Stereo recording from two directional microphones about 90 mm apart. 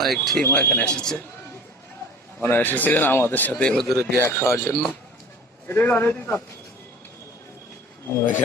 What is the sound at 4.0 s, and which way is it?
A man's voice, 30° left (ahead or behind).